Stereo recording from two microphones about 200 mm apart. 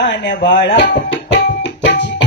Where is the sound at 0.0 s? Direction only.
65° left (ahead or behind).